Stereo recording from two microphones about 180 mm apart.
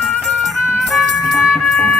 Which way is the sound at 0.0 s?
Centre (ahead or behind).